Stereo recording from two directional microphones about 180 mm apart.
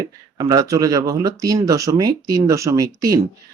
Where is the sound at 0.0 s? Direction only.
20° right (ahead or behind).